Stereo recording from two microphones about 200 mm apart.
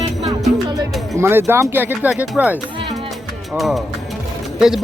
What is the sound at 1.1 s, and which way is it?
A man's voice, 10° right (ahead or behind).